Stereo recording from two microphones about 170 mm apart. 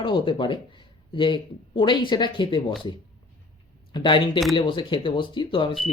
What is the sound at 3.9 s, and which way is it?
Speech, 30° left (ahead or behind).